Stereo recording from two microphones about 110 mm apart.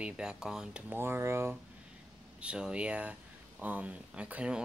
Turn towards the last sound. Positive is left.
turn(degrees=-10)  # may be behind; listen again after turning